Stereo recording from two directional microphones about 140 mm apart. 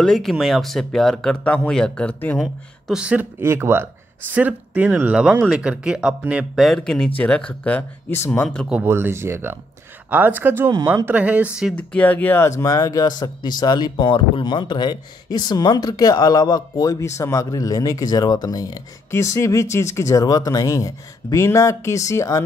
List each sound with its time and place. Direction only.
0.0 s speech: centre (ahead or behind)
2.4 s speech: 5° right (ahead or behind); by 8.5 s 15° left (ahead or behind)
8.6 s speech: 15° right (ahead or behind)
11.7 s speech: 10° left (ahead or behind)